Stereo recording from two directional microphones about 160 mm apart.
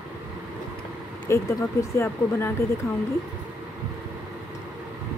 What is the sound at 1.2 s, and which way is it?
Speech, 15° left (ahead or behind).